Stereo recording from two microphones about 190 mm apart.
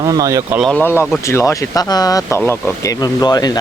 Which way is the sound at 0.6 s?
5° left (ahead or behind).